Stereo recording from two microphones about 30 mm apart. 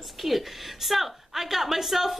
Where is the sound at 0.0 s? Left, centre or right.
Centre.